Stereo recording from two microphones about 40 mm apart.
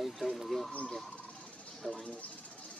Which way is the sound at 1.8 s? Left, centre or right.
Centre.